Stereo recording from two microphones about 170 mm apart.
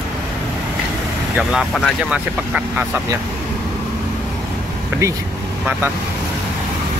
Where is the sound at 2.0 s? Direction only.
5° right (ahead or behind).